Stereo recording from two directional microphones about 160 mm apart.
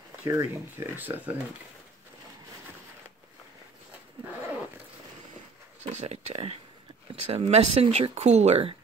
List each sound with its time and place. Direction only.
0.2 s speech: 15° right (ahead or behind)
5.9 s speech: 40° right (ahead or behind)